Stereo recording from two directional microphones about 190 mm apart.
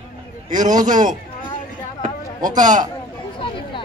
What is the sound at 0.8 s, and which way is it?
Speech, 40° right (ahead or behind).